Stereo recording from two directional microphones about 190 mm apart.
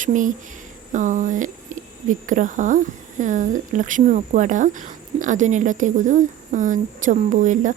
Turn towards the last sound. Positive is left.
turn(degrees=-40)  # may be behind; listen again after turning